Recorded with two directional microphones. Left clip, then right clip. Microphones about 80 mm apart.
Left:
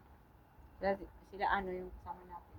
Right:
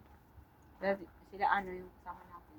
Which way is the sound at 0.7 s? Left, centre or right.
Left.